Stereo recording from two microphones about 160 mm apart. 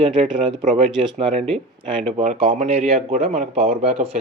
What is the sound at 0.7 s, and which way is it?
Speech, 40° right (ahead or behind).